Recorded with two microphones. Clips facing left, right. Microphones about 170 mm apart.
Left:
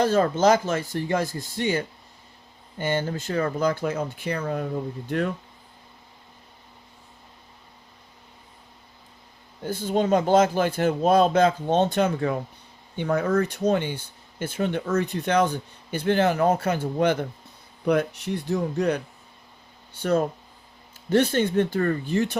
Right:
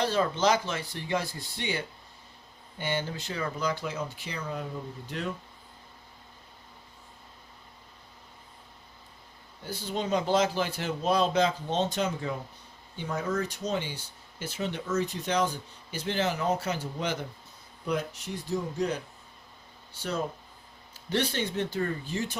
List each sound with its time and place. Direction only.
0.0 s a man's voice: 45° left (ahead or behind)
9.6 s a man's voice: 50° left (ahead or behind)
19.9 s a man's voice: 55° left (ahead or behind)